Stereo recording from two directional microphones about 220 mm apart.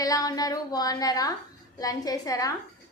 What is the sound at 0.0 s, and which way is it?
A woman's voice, 15° left (ahead or behind).